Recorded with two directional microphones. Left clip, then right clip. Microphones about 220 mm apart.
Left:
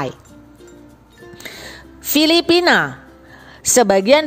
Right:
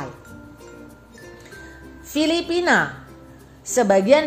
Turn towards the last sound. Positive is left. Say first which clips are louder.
# left 3 dB
turn(degrees=40)  # may be behind; listen again after turning